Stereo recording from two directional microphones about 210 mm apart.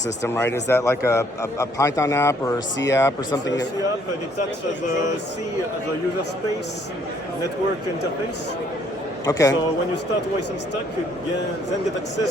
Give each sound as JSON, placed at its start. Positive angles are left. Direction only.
{"t": 0.3, "sound": "a man's voice", "side_deg": 10}
{"t": 9.2, "sound": "a man's voice", "side_deg": 20}